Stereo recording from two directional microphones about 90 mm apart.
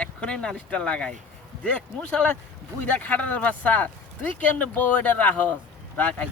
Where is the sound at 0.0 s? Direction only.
10° left (ahead or behind).